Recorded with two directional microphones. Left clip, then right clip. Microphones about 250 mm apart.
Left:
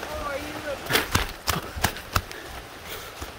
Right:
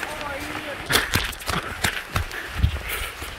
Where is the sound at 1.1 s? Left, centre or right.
Centre.